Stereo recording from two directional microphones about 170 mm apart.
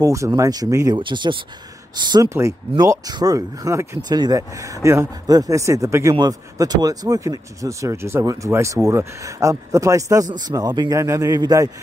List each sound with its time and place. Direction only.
0.0 s speech: 20° right (ahead or behind)